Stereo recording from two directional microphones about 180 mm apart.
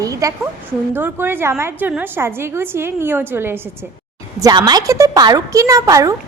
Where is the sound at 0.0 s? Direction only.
20° right (ahead or behind).